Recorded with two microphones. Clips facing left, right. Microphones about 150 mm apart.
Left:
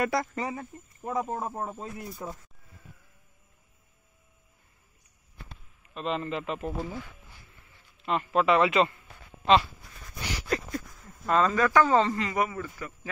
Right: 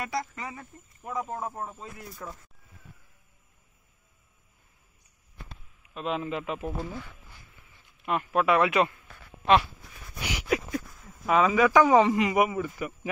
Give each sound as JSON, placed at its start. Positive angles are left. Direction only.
{"t": 0.0, "sound": "speech", "side_deg": 55}
{"t": 0.4, "sound": "speech", "side_deg": 30}
{"t": 5.9, "sound": "a man's voice", "side_deg": -5}
{"t": 8.0, "sound": "a man's voice", "side_deg": -5}
{"t": 10.5, "sound": "speech", "side_deg": -5}